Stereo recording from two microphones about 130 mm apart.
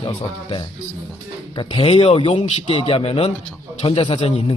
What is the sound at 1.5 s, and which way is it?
A man's voice, 45° left (ahead or behind).